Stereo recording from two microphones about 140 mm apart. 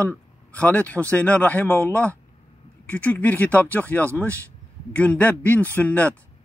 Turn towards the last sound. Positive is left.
turn(degrees=10)  # may be behind; listen again after turning